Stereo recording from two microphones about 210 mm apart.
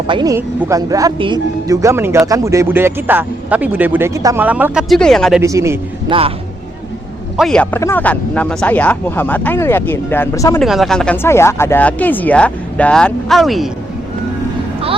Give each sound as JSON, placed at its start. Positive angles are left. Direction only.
{"t": 0.1, "sound": "speech", "side_deg": -20}
{"t": 5.4, "sound": "speech", "side_deg": -15}
{"t": 6.1, "sound": "speech", "side_deg": -25}
{"t": 7.3, "sound": "speech", "side_deg": 5}
{"t": 10.6, "sound": "speech", "side_deg": 0}